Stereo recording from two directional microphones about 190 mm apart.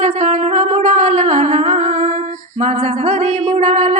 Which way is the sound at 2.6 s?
35° right (ahead or behind).